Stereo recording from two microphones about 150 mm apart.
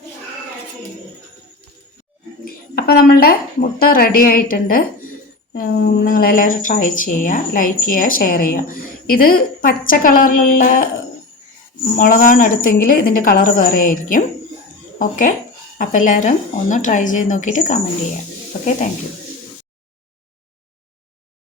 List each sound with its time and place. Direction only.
2.7 s a woman's voice: 90° left; by 4.8 s 70° left (ahead or behind)
5.5 s speech: 90° left; by 10.8 s 65° left (ahead or behind)
11.9 s a woman's voice: 65° left (ahead or behind)